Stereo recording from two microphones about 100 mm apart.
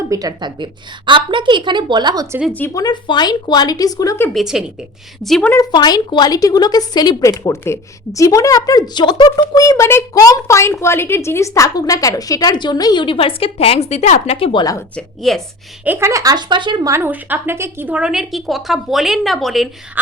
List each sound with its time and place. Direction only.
0.1 s a woman's voice: 40° right (ahead or behind)
2.7 s a woman's voice: 45° left (ahead or behind)
4.4 s a woman's voice: 5° right (ahead or behind)
5.7 s a woman's voice: 45° left (ahead or behind)
7.2 s a woman's voice: 30° left (ahead or behind)
9.6 s a child's voice: 30° left (ahead or behind); by 14.6 s 65° left (ahead or behind)
14.9 s a woman's voice: 5° left (ahead or behind)
15.8 s speech: 20° right (ahead or behind); by 16.8 s 50° right (ahead or behind)
16.8 s speech: 30° right (ahead or behind)
17.1 s speech: 15° right (ahead or behind)
17.9 s a woman's voice: 10° right (ahead or behind)